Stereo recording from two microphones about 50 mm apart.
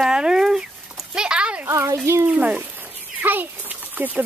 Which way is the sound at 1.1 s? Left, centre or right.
Centre.